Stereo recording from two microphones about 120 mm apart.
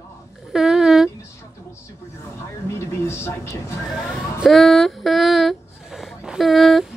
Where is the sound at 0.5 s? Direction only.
5° right (ahead or behind).